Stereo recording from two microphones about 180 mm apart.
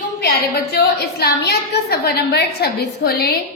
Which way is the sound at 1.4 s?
65° left (ahead or behind).